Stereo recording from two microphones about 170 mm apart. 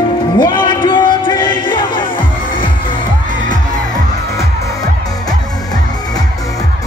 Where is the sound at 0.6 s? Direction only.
30° left (ahead or behind).